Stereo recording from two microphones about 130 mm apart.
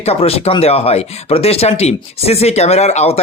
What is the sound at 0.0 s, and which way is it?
Speech, 50° left (ahead or behind).